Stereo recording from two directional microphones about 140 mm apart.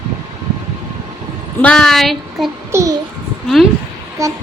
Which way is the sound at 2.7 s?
25° right (ahead or behind).